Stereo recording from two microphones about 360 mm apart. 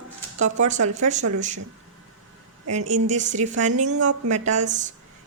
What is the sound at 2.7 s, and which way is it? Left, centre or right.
A woman's voice, centre.